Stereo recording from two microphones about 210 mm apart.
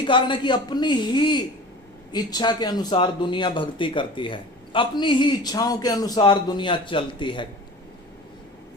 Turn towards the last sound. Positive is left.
turn(degrees=25)  # may be behind; listen again after turning